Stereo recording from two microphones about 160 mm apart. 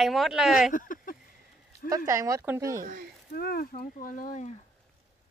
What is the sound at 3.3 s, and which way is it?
Speech, 75° left (ahead or behind).